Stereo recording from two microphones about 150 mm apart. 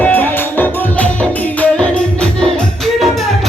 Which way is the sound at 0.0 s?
10° left (ahead or behind).